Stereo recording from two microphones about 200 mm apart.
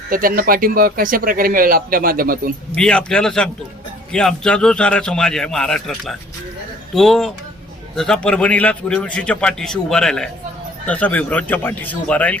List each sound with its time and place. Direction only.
0.1 s speech: 45° right (ahead or behind)
2.7 s a man's voice: 5° left (ahead or behind)